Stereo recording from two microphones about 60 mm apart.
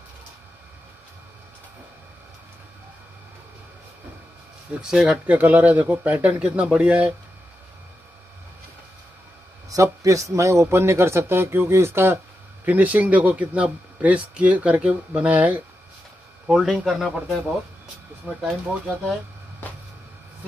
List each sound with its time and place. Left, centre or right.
4.8 s speech: centre
5.2 s speech: right
9.7 s a man's voice: right
12.6 s speech: right
16.4 s speech: centre
18.3 s speech: centre